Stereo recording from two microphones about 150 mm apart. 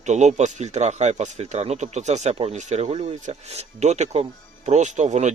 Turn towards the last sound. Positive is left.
turn(degrees=-50)  # may be behind; listen again after turning